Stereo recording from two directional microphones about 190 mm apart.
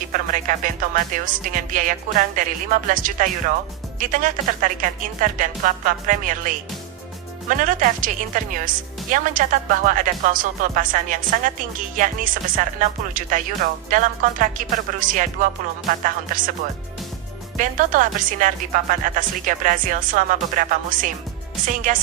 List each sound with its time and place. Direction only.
0.1 s speech: 45° right (ahead or behind)
7.5 s speech: 45° right (ahead or behind)
17.6 s speech: 45° right (ahead or behind)